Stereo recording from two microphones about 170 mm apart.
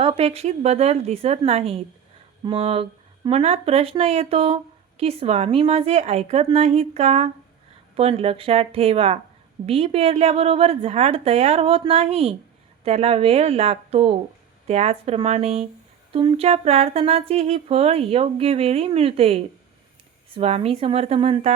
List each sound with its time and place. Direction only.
0.0 s speech: 35° right (ahead or behind)